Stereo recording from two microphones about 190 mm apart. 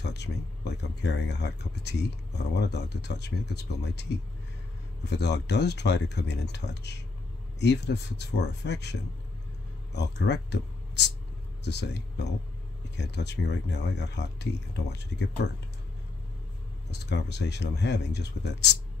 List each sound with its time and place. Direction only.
0.0 s speech: 65° left (ahead or behind)
9.9 s speech: 65° left (ahead or behind)
16.9 s speech: 65° left (ahead or behind)